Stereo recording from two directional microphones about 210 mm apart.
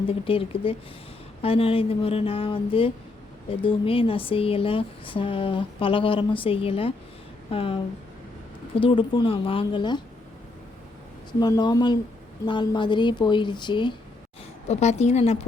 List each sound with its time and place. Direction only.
0.1 s speech: 25° left (ahead or behind)
11.3 s speech: 20° left (ahead or behind)
14.7 s a woman's voice: 30° left (ahead or behind)